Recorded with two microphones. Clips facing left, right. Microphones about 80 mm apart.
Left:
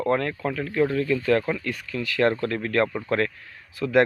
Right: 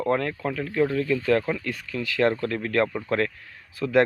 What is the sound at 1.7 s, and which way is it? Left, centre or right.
Speech, right.